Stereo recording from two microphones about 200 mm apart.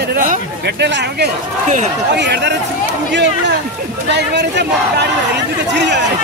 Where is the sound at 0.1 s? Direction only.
40° right (ahead or behind).